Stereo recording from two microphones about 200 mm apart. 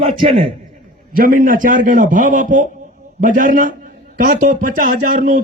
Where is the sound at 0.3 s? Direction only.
25° right (ahead or behind).